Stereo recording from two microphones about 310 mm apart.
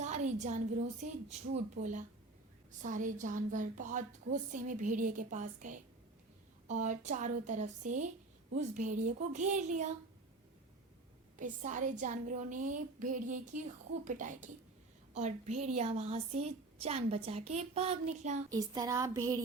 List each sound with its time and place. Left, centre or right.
0.0 s a sound: right
1.3 s a woman's voice: right
11.3 s a woman's voice: right
18.4 s speech: centre